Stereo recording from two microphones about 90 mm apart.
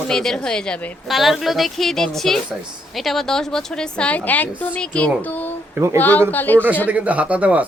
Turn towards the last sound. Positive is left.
turn(degrees=-15)  # may be behind; listen again after turning